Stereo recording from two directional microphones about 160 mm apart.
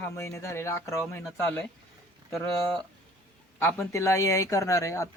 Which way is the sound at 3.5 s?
15° left (ahead or behind).